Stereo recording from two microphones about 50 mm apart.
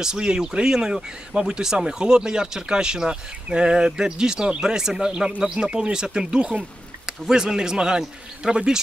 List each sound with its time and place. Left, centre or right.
0.0 s speech: centre